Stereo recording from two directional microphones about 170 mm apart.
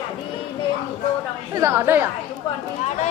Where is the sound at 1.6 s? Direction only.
15° right (ahead or behind).